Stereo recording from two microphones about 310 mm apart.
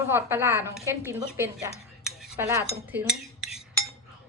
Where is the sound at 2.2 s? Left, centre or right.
Centre.